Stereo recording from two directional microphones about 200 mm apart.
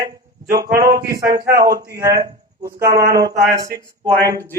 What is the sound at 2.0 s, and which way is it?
A man's voice, 15° right (ahead or behind).